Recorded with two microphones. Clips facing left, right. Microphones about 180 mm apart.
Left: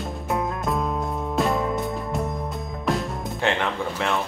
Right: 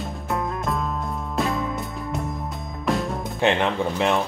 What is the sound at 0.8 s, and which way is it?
Music, 15° left (ahead or behind).